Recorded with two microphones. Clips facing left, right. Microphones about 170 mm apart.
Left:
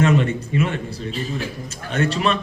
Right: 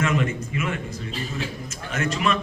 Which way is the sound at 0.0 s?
30° left (ahead or behind).